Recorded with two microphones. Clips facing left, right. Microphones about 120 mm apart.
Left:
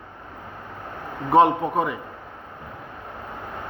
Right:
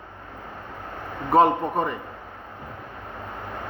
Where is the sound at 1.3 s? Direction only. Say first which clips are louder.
Left 1 dB; centre (ahead or behind).